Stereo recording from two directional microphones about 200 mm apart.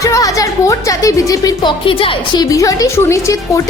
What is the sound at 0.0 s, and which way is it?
A woman's voice, 15° left (ahead or behind).